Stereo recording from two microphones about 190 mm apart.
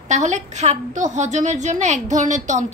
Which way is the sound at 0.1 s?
40° right (ahead or behind).